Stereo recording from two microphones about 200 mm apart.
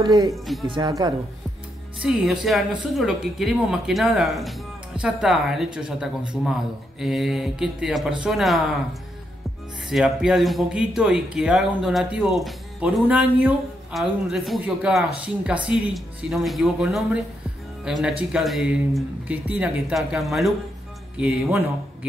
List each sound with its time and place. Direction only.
0.0 s speech: 15° right (ahead or behind)
2.0 s speech: 5° right (ahead or behind)
9.8 s speech: 5° right (ahead or behind)